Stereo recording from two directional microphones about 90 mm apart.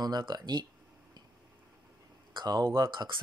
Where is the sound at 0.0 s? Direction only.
50° right (ahead or behind).